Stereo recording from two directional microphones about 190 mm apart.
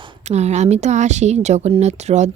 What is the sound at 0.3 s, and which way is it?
Speech, 35° right (ahead or behind).